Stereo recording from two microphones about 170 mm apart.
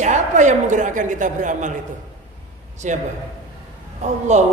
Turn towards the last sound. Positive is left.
turn(degrees=-45)  # may be behind; listen again after turning